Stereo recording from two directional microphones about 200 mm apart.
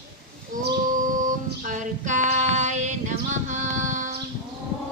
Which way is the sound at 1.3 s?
40° right (ahead or behind).